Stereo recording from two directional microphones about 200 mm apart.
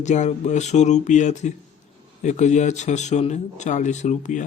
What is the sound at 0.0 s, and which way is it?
Speech, 35° left (ahead or behind).